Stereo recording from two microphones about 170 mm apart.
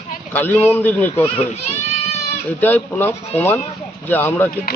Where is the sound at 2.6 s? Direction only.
10° left (ahead or behind).